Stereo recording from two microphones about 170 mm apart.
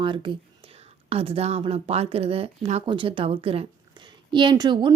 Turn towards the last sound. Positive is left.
turn(degrees=-25)  # may be behind; listen again after turning